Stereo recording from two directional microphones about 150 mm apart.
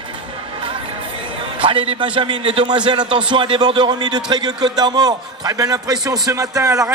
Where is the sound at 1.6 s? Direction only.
35° right (ahead or behind).